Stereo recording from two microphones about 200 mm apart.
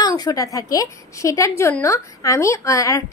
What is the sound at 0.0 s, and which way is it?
A woman's voice, 20° left (ahead or behind).